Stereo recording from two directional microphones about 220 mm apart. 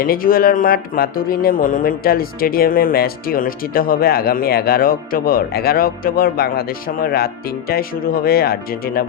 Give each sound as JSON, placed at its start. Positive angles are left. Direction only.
{"t": 0.0, "sound": "speech", "side_deg": 40}